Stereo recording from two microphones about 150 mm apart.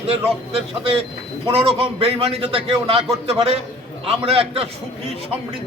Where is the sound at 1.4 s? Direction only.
40° right (ahead or behind).